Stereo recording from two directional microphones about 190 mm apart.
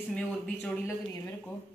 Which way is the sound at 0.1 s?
10° left (ahead or behind).